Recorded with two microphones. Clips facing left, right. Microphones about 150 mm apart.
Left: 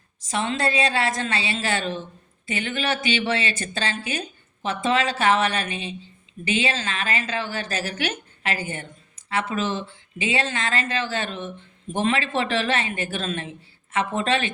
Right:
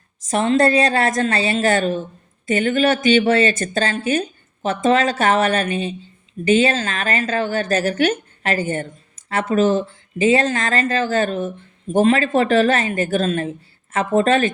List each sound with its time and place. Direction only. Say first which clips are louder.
0.2 s speech: right 9 dB; 45° right (ahead or behind)